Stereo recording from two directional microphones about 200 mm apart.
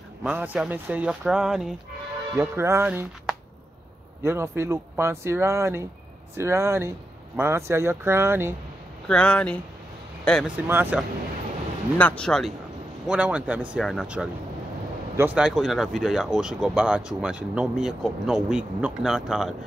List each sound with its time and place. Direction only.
0.2 s speech: 5° right (ahead or behind)
9.0 s speech: 5° left (ahead or behind)
10.5 s speech: 10° right (ahead or behind)
12.0 s speech: 5° left (ahead or behind)